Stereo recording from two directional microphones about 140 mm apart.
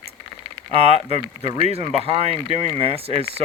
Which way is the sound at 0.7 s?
45° right (ahead or behind).